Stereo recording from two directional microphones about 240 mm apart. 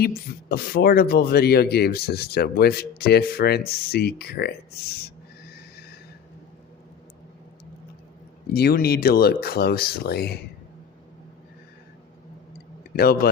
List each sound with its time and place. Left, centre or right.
0.0 s speech: left
8.5 s speech: left